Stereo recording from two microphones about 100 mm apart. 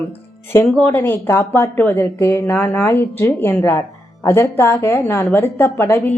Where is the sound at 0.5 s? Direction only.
25° left (ahead or behind).